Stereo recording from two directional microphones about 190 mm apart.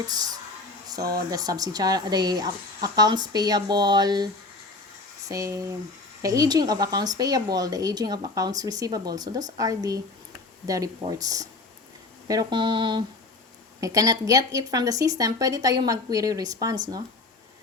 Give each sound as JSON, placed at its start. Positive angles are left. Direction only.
{"t": 0.1, "sound": "speech", "side_deg": -20}
{"t": 5.3, "sound": "speech", "side_deg": -15}